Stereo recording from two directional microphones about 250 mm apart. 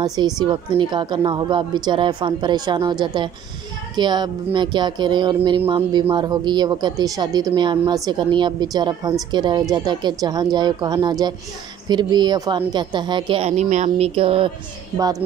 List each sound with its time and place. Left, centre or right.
0.0 s speech: centre